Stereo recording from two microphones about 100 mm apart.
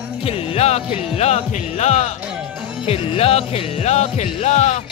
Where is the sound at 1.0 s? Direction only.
90° left.